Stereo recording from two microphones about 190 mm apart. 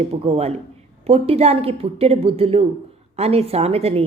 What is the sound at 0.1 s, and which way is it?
Speech, 35° right (ahead or behind).